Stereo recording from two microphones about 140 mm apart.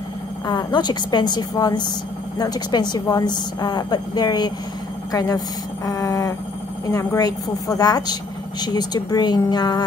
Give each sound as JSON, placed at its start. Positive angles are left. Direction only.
{"t": 0.5, "sound": "a woman's voice", "side_deg": 30}
{"t": 5.9, "sound": "a woman's voice", "side_deg": 25}